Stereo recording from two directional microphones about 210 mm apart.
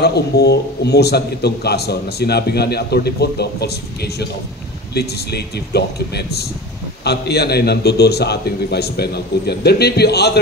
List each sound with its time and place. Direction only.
0.0 s a man's voice: 50° left (ahead or behind)
4.9 s a man's voice: 50° left (ahead or behind)